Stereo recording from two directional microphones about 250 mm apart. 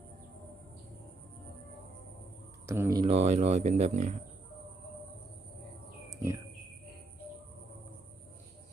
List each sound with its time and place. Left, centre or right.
2.6 s speech: centre; by 4.1 s right